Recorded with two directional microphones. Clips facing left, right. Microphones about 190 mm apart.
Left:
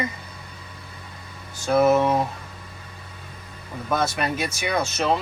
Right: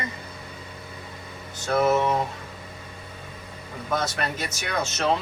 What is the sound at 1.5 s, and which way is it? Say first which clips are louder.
Speech: left 4 dB; 10° left (ahead or behind).